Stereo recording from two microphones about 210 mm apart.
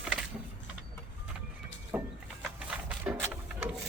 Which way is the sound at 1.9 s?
5° right (ahead or behind).